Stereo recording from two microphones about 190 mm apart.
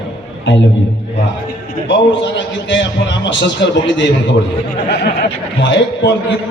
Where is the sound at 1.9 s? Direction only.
70° left (ahead or behind).